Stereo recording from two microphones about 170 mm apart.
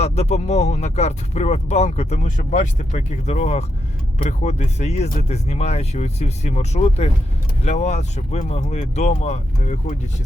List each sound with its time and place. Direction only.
0.0 s speech: 40° left (ahead or behind)